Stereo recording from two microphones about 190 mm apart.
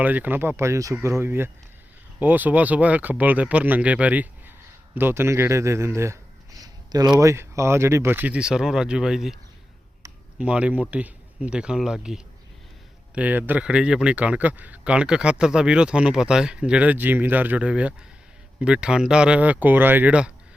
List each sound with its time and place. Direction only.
0.0 s speech: 10° right (ahead or behind)
6.6 s a sound: 20° right (ahead or behind)
7.2 s speech: 15° right (ahead or behind)
10.3 s speech: 5° right (ahead or behind)